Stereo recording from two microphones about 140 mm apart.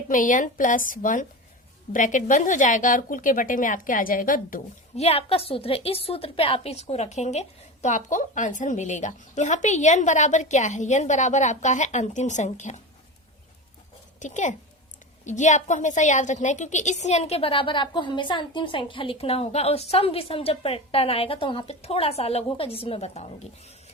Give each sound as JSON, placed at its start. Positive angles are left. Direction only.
{"t": 0.1, "sound": "a woman's voice", "side_deg": 70}
{"t": 4.9, "sound": "a woman's voice", "side_deg": 45}
{"t": 14.2, "sound": "a woman's voice", "side_deg": 60}